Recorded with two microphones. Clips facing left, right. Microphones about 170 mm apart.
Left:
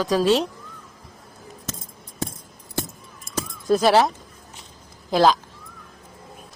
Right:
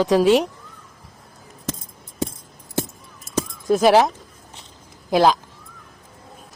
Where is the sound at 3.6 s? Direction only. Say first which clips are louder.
Right 2 dB; 10° right (ahead or behind).